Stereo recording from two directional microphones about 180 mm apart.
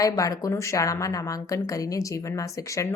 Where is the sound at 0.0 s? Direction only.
20° left (ahead or behind).